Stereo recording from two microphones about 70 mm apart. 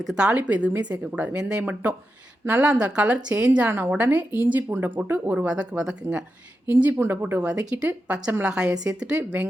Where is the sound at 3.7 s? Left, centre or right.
Right.